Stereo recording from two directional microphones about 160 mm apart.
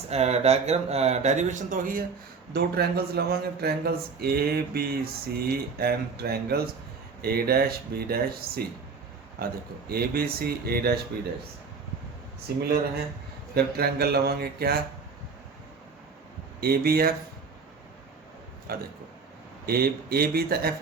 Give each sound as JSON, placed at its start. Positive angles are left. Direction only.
{"t": 0.1, "sound": "speech", "side_deg": -40}
{"t": 2.5, "sound": "speech", "side_deg": -80}
{"t": 13.5, "sound": "speech", "side_deg": -75}
{"t": 16.6, "sound": "speech", "side_deg": -75}
{"t": 18.7, "sound": "speech", "side_deg": -70}